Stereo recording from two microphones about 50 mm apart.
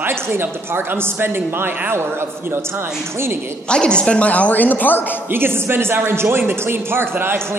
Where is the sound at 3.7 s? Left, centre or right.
Centre; by 5.2 s left.